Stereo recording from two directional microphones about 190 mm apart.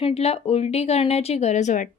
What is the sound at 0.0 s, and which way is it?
Speech, 30° left (ahead or behind).